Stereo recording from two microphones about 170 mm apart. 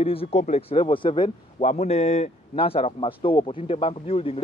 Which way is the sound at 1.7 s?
40° left (ahead or behind).